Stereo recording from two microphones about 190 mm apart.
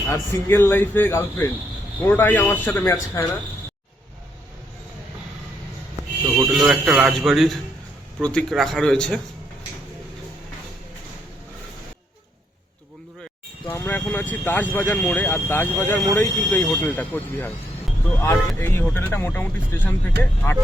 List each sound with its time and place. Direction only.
0.1 s speech: 15° left (ahead or behind)
6.3 s speech: centre (ahead or behind)
13.7 s speech: 10° left (ahead or behind)